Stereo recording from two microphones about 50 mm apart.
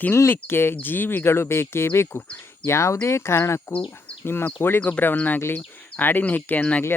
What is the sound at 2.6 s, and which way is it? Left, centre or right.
Speech, left.